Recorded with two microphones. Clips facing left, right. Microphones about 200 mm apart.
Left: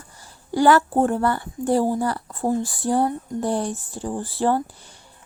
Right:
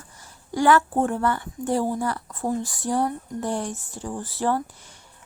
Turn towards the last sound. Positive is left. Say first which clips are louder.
# left 3 dB
turn(degrees=30)  # may be behind; listen again after turning